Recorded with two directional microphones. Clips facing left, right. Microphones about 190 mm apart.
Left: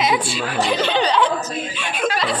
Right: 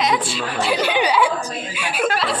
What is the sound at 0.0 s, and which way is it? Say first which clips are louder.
Chuckle: left 1 dB; 5° left (ahead or behind).